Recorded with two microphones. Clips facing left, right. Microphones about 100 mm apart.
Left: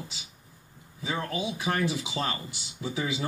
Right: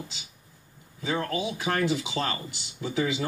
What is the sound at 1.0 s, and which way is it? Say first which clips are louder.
Speech: right 3 dB; 15° left (ahead or behind).